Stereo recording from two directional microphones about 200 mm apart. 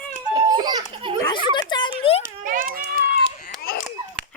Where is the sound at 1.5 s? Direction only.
20° left (ahead or behind).